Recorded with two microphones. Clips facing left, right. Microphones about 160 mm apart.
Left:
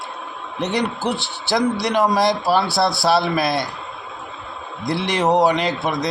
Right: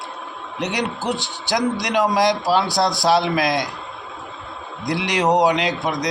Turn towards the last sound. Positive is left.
turn(degrees=-15)  # may be behind; listen again after turning